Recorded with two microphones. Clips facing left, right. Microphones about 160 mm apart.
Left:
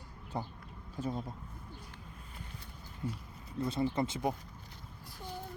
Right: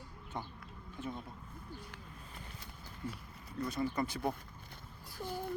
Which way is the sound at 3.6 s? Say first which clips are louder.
Left 3 dB; 25° left (ahead or behind).